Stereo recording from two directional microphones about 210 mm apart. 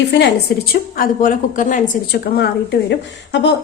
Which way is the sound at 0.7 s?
40° left (ahead or behind).